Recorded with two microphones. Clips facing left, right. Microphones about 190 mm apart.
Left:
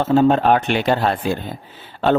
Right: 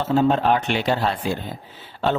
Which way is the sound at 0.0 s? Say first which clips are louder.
Left 4 dB; 55° left (ahead or behind).